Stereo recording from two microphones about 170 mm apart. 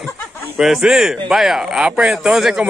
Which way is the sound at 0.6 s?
5° right (ahead or behind).